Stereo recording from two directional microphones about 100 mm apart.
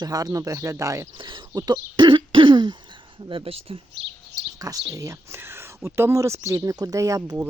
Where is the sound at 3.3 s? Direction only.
70° right (ahead or behind).